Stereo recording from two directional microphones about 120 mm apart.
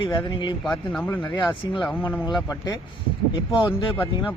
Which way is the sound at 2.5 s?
35° left (ahead or behind).